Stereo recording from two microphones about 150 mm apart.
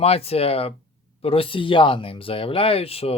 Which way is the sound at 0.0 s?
40° left (ahead or behind).